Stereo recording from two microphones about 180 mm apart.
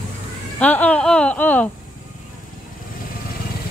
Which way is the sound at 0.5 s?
10° left (ahead or behind).